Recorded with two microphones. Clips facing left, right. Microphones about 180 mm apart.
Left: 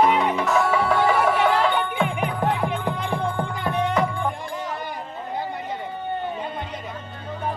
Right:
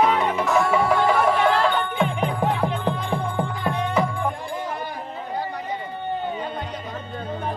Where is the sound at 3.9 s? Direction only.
Centre (ahead or behind).